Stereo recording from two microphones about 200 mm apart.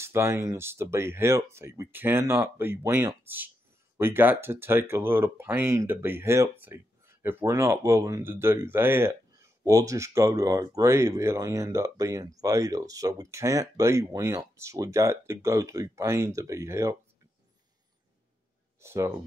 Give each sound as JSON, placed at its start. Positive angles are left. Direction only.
{"t": 0.0, "sound": "speech", "side_deg": -15}
{"t": 18.8, "sound": "speech", "side_deg": -15}